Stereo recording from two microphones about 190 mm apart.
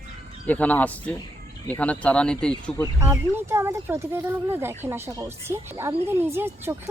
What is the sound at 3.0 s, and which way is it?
A woman's voice, 10° right (ahead or behind).